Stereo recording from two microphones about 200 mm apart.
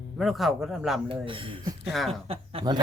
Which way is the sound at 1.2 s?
25° right (ahead or behind).